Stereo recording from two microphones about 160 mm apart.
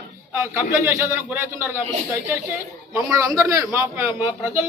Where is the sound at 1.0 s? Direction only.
15° right (ahead or behind).